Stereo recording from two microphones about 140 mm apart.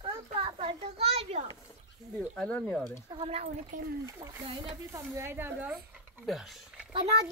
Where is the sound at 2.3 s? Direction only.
10° left (ahead or behind).